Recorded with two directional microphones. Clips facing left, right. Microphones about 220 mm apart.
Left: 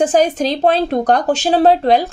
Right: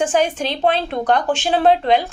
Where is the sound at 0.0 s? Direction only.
40° left (ahead or behind).